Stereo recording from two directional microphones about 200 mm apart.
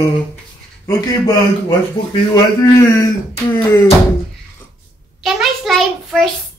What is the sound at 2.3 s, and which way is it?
Speech, 15° left (ahead or behind).